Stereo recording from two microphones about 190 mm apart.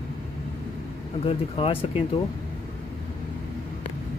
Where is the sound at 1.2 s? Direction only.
30° left (ahead or behind).